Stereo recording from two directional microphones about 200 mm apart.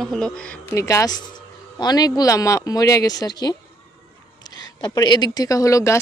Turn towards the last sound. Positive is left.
turn(degrees=15)  # may be behind; listen again after turning